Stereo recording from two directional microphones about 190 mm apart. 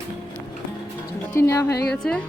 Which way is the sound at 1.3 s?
15° left (ahead or behind).